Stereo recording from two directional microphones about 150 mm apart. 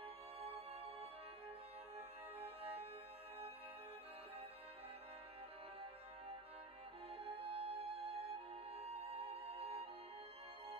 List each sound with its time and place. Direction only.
2.0 s music: 40° right (ahead or behind)
7.2 s music: 40° right (ahead or behind)